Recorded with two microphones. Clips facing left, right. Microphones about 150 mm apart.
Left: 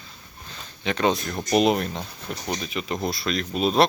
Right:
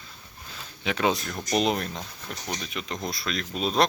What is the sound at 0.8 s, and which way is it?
Speech, 5° right (ahead or behind).